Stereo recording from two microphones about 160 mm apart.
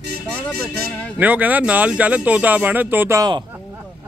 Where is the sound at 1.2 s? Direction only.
10° right (ahead or behind).